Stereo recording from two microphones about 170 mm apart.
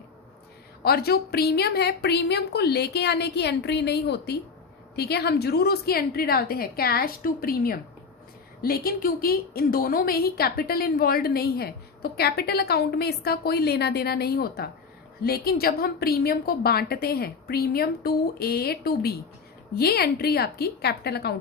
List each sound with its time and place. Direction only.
0.9 s a woman's voice: 65° left (ahead or behind)